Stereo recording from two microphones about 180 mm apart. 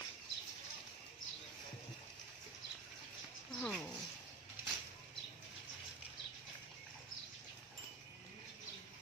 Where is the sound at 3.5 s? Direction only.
Centre (ahead or behind).